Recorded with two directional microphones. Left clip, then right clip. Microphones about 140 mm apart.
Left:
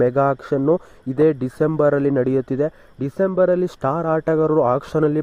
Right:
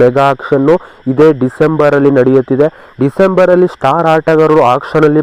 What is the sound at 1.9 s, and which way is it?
Speech, 30° left (ahead or behind).